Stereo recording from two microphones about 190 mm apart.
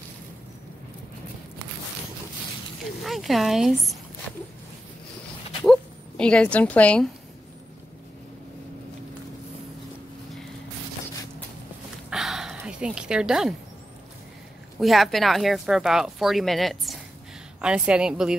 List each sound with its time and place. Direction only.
3.0 s speech: centre (ahead or behind)
5.7 s speech: 5° left (ahead or behind)
12.1 s dog: centre (ahead or behind)
14.8 s speech: centre (ahead or behind)